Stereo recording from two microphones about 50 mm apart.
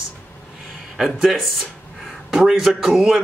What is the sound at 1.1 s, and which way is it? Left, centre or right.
A man's voice, centre.